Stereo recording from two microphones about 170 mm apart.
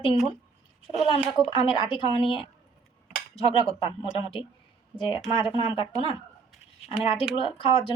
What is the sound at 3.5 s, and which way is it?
A woman's voice, 30° left (ahead or behind).